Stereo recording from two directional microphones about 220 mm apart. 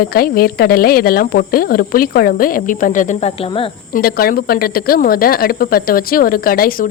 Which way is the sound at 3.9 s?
40° left (ahead or behind).